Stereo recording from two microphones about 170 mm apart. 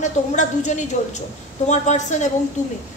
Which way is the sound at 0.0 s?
45° left (ahead or behind).